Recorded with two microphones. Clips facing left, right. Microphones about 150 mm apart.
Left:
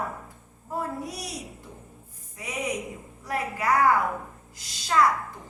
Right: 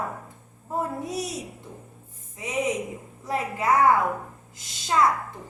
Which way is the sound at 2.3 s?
20° right (ahead or behind).